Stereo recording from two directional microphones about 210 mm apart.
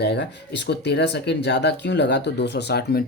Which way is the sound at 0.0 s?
55° left (ahead or behind).